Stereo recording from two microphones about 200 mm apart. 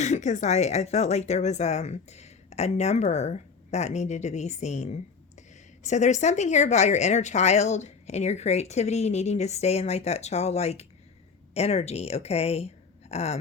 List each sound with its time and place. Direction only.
0.0 s speech: 35° left (ahead or behind)